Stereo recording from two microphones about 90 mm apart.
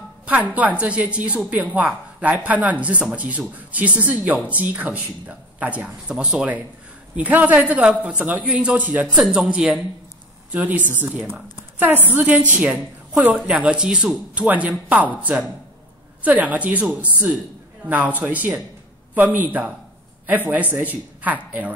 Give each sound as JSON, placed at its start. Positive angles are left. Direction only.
{"t": 0.3, "sound": "speech", "side_deg": -15}